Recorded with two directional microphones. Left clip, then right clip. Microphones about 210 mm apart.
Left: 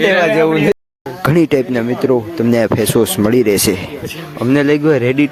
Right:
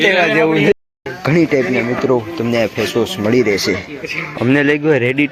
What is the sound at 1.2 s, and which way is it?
Speech, 45° left (ahead or behind).